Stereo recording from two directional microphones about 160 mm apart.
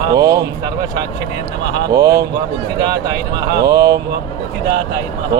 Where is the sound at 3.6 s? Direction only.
25° right (ahead or behind).